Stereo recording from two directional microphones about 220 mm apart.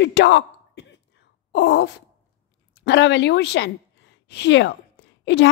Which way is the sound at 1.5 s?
50° left (ahead or behind).